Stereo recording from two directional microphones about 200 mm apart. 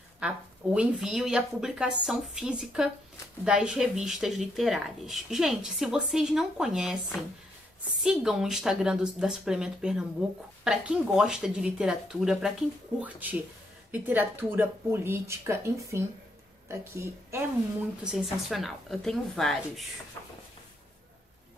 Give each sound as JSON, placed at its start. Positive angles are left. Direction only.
{"t": 0.2, "sound": "speech", "side_deg": -5}
{"t": 18.0, "sound": "speech", "side_deg": 0}